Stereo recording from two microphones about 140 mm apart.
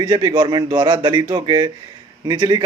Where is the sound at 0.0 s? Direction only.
30° right (ahead or behind).